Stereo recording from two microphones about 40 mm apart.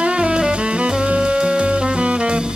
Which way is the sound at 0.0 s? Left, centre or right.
Right.